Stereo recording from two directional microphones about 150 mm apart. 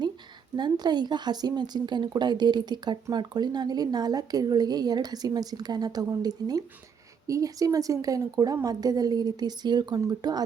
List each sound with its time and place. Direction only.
0.5 s a woman's voice: 30° right (ahead or behind)